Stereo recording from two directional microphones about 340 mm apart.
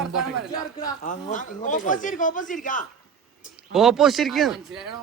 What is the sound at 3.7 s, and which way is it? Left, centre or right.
Speech, centre.